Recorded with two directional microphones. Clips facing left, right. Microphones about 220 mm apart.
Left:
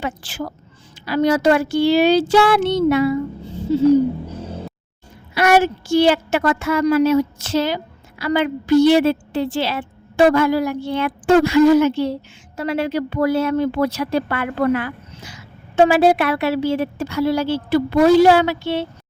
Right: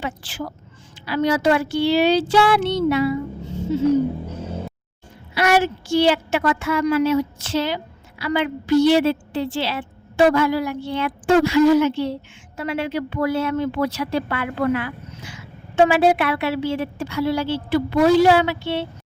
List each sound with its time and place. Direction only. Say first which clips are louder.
0.0 s a woman's voice: left 2 dB; 45° left (ahead or behind)
3.4 s music: left 4 dB; 35° left (ahead or behind)
5.3 s a woman's voice: left 3 dB; 50° left (ahead or behind)